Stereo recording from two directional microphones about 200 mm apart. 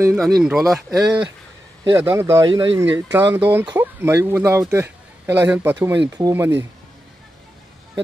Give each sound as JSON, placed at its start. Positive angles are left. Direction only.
{"t": 0.1, "sound": "speech", "side_deg": 0}
{"t": 1.9, "sound": "speech", "side_deg": -15}